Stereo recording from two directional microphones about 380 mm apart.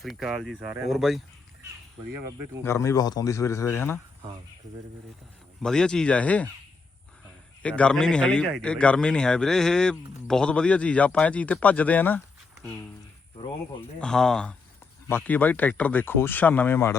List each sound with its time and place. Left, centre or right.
0.0 s a man's voice: centre
2.6 s a man's voice: centre
5.6 s a man's voice: centre
7.6 s a man's voice: centre
14.0 s a man's voice: centre